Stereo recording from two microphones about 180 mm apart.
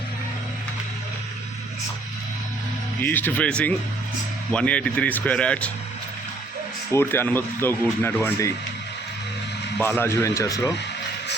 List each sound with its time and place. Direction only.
3.0 s speech: 10° left (ahead or behind)
6.9 s speech: 10° left (ahead or behind)
9.7 s speech: 10° left (ahead or behind)